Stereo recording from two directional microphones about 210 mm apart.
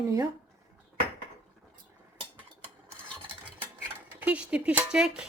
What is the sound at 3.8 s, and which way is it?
Speech, 5° right (ahead or behind).